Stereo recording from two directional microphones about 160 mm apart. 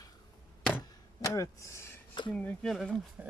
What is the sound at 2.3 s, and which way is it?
Speech, 10° left (ahead or behind).